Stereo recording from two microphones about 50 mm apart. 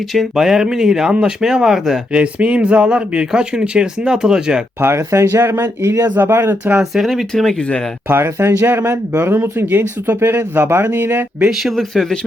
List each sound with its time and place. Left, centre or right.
0.1 s speech: centre
2.1 s speech: right
4.8 s speech: right
5.4 s speech: right
6.9 s speech: centre
8.0 s speech: right
11.4 s speech: centre
11.7 s speech: centre